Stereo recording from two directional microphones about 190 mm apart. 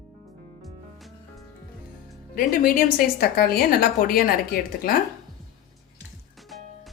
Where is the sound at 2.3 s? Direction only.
50° left (ahead or behind).